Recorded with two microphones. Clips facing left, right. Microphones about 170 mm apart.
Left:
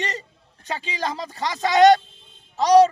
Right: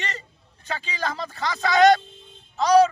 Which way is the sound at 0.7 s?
35° left (ahead or behind).